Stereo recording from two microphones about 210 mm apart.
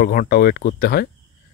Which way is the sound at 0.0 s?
45° left (ahead or behind).